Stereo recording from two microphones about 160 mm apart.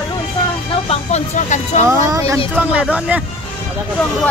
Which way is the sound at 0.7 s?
40° left (ahead or behind).